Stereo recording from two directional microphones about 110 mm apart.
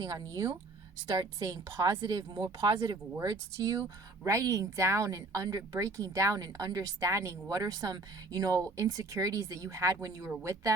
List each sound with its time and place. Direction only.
1.0 s a woman's voice: 35° right (ahead or behind)